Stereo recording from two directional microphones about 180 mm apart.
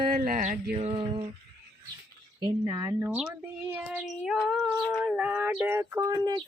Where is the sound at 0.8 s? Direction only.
30° right (ahead or behind).